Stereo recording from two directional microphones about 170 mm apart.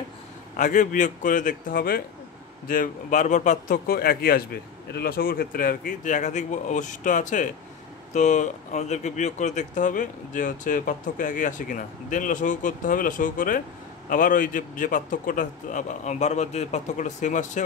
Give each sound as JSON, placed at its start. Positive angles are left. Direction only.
{"t": 0.6, "sound": "speech", "side_deg": 50}